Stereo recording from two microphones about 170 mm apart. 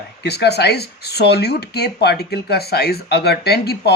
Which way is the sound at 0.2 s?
75° left (ahead or behind).